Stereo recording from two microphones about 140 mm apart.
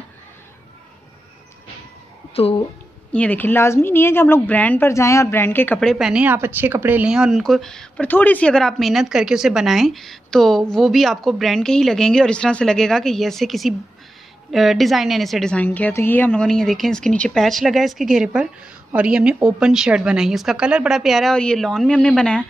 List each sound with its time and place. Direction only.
2.3 s speech: 45° left (ahead or behind)
3.1 s speech: 10° left (ahead or behind)
5.8 s speech: centre (ahead or behind)